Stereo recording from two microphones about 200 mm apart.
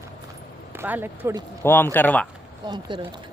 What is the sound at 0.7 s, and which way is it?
Speech, 10° right (ahead or behind).